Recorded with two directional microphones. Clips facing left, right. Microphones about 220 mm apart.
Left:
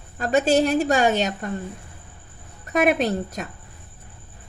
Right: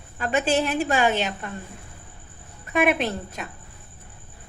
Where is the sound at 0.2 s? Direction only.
40° left (ahead or behind).